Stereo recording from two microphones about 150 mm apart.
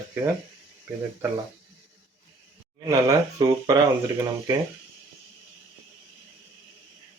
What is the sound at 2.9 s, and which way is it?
Speech, 25° right (ahead or behind).